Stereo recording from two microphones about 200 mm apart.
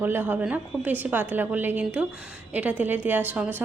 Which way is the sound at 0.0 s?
10° right (ahead or behind).